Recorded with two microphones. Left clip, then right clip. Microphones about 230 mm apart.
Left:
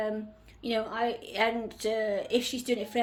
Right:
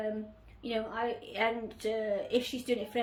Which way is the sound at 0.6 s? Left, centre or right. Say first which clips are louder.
Left 4 dB; left.